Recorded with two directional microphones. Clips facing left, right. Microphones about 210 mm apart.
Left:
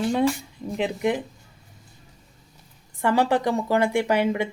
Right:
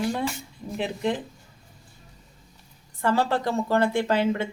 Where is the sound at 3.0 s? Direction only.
15° left (ahead or behind).